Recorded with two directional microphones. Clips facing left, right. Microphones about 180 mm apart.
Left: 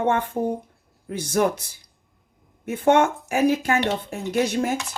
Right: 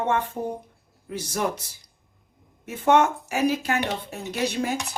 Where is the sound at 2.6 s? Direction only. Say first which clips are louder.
Left 2 dB; 55° left (ahead or behind).